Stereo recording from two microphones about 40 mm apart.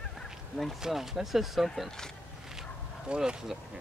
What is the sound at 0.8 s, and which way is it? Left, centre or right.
Speech, centre.